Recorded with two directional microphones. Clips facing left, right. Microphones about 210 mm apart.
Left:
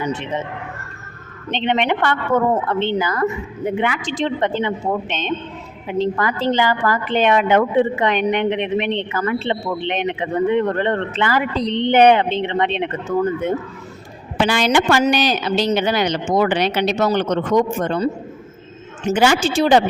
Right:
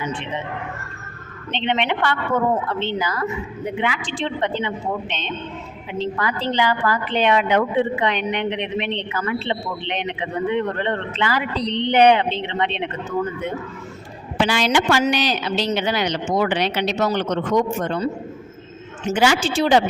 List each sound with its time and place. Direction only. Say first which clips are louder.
0.0 s speech: left 4 dB; 40° left (ahead or behind)
1.5 s a woman's voice: left 3 dB; 45° left (ahead or behind)
14.4 s a woman's voice: left 3 dB; 50° left (ahead or behind)